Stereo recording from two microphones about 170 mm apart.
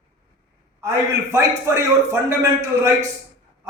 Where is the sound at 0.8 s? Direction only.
15° right (ahead or behind).